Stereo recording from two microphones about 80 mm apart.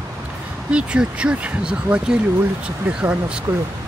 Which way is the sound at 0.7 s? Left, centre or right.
Centre.